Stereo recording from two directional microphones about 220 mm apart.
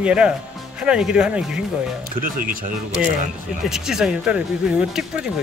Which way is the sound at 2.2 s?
40° right (ahead or behind).